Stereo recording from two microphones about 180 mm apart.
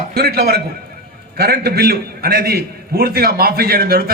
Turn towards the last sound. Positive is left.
turn(degrees=-55)  # may be behind; listen again after turning